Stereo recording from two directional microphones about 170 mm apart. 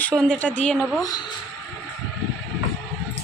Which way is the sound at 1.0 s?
25° left (ahead or behind).